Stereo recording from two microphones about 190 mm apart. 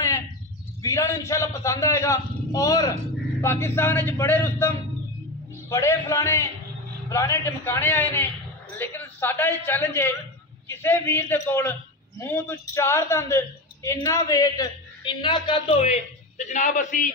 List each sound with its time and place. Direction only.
0.8 s a man's voice: 15° left (ahead or behind); by 17.1 s 45° left (ahead or behind)